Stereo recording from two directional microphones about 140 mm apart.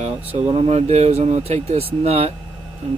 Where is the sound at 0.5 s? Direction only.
50° right (ahead or behind).